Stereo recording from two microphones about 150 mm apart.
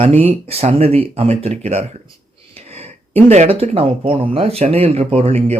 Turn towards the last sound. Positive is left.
turn(degrees=-45)  # may be behind; listen again after turning